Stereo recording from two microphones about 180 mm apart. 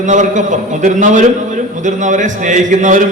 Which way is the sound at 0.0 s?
45° right (ahead or behind).